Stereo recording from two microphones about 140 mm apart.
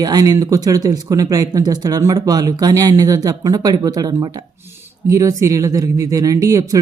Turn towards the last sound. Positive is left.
turn(degrees=-25)  # may be behind; listen again after turning